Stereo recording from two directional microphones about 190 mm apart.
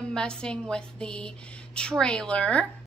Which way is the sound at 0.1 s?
5° left (ahead or behind).